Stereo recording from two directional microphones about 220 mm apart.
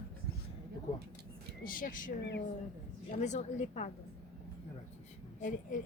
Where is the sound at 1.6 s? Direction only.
40° left (ahead or behind).